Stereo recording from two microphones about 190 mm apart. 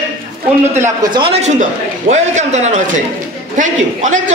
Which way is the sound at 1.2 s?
35° right (ahead or behind).